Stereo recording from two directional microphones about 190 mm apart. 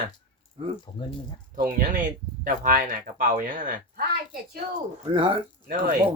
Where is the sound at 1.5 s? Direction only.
45° right (ahead or behind).